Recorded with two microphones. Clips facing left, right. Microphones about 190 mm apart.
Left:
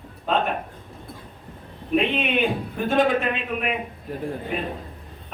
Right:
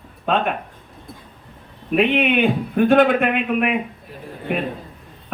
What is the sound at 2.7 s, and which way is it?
A man's voice, 65° right (ahead or behind).